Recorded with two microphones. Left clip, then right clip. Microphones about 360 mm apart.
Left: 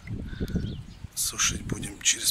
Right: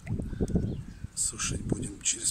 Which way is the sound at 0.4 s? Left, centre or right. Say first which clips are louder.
Right 3 dB; right.